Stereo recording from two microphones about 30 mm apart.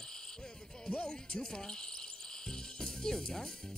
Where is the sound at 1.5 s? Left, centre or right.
Left.